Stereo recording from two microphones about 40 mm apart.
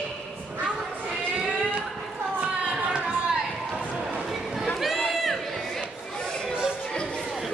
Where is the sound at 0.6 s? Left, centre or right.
Right.